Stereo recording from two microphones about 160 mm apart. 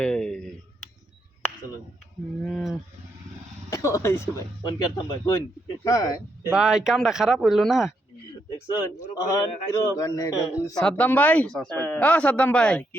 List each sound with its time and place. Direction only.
0.0 s a sound: 5° left (ahead or behind)
2.4 s sheep: centre (ahead or behind)
3.7 s speech: 20° left (ahead or behind)
6.5 s speech: 5° right (ahead or behind)
8.4 s speech: 25° left (ahead or behind)
10.8 s speech: 5° left (ahead or behind)